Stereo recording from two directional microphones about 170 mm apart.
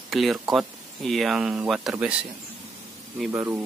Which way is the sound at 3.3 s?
15° right (ahead or behind).